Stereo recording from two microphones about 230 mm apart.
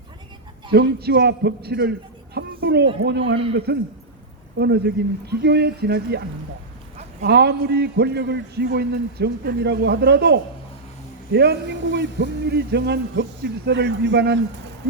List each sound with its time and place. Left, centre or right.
0.7 s a man's voice: right
2.3 s a sound: right
3.0 s a man's voice: right